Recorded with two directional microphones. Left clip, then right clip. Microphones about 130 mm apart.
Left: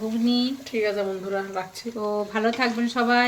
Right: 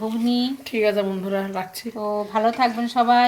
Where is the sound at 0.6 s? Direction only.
55° right (ahead or behind).